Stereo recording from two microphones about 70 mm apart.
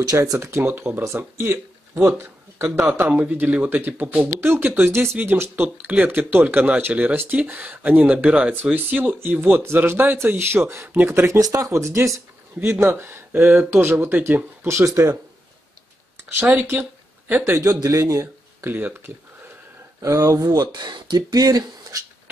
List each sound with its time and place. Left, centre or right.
0.4 s speech: right
2.9 s speech: right
4.4 s speech: right
11.4 s speech: right
17.5 s speech: right
18.2 s a sound: right
20.0 s speech: right
20.3 s speech: right